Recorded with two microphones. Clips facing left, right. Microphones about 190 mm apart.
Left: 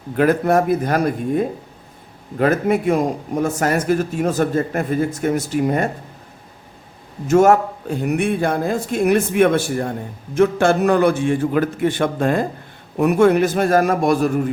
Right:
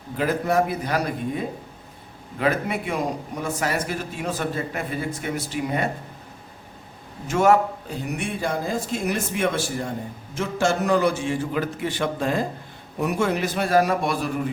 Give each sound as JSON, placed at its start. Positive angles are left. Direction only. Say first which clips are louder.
{"t": 0.2, "sound": "a man's voice", "louder": "left 6 dB", "side_deg": 55}
{"t": 7.3, "sound": "a man's voice", "louder": "left 5 dB", "side_deg": 45}